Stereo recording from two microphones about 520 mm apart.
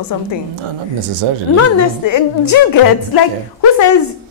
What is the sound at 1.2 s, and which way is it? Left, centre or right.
Speech, right.